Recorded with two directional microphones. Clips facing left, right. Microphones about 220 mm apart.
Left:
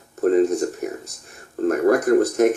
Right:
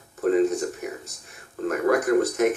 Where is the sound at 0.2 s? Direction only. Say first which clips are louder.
Left 4 dB; 40° left (ahead or behind).